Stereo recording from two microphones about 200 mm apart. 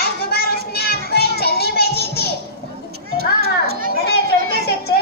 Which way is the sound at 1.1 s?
50° left (ahead or behind).